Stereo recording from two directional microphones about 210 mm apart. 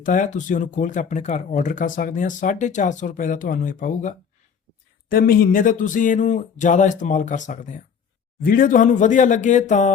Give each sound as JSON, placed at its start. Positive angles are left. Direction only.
{"t": 0.0, "sound": "speech", "side_deg": 40}